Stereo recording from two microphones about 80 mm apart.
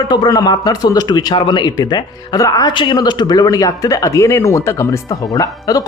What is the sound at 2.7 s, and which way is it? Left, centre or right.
Speech, left.